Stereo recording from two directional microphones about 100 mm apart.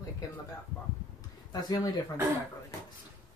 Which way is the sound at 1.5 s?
40° left (ahead or behind).